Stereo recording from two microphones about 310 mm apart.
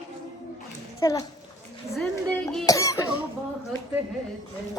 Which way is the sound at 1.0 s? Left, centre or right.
Centre.